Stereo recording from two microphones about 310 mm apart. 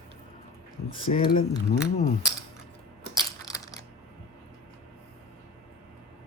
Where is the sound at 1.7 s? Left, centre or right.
Left.